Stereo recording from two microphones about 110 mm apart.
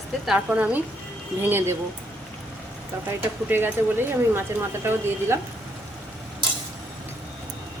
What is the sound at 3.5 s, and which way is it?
Speech, 20° right (ahead or behind).